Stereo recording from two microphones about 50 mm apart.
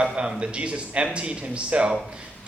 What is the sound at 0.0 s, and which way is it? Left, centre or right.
A man's voice, centre.